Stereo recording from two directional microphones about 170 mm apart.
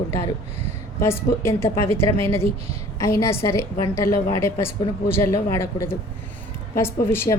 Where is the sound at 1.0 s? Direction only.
15° left (ahead or behind).